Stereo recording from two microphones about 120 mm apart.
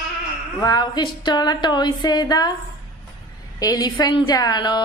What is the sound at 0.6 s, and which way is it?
Speech, 35° left (ahead or behind).